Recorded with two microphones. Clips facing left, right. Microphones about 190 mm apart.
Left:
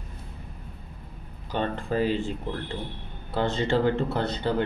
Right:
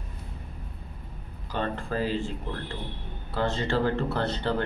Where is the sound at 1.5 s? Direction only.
20° left (ahead or behind).